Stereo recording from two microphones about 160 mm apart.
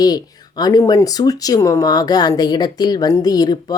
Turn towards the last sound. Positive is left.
turn(degrees=25)  # may be behind; listen again after turning